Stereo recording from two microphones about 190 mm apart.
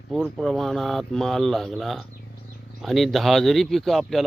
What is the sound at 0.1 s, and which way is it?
A man's voice, centre (ahead or behind).